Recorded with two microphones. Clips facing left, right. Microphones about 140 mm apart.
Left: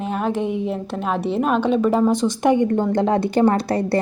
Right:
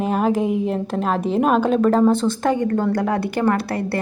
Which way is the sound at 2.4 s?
20° left (ahead or behind).